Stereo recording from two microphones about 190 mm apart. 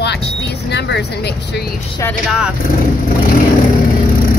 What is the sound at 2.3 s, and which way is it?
Speech, 5° right (ahead or behind).